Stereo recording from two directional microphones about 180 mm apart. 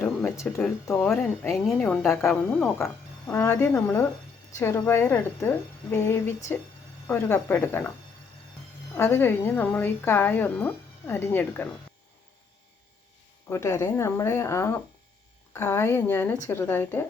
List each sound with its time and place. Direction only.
0.0 s music: 10° left (ahead or behind)
0.6 s speech: 5° left (ahead or behind)
2.0 s a woman's voice: 15° left (ahead or behind)
9.0 s a woman's voice: 15° left (ahead or behind)
13.5 s a woman's voice: 15° left (ahead or behind)